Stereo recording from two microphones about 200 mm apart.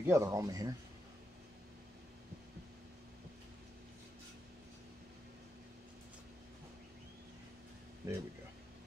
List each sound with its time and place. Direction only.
0.0 s speech: 15° right (ahead or behind)
8.0 s speech: 15° right (ahead or behind)